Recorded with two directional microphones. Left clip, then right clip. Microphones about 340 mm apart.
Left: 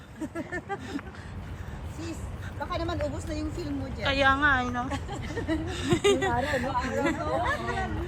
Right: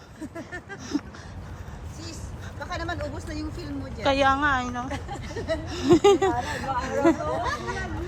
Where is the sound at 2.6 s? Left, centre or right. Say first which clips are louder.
Even; right.